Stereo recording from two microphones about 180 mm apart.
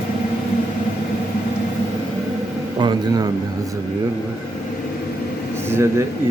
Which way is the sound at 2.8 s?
20° right (ahead or behind).